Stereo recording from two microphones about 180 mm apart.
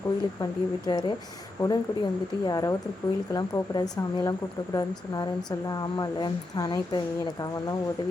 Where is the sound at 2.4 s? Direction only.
20° left (ahead or behind).